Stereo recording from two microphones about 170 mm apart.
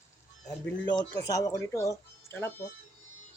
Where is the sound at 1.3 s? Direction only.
20° left (ahead or behind).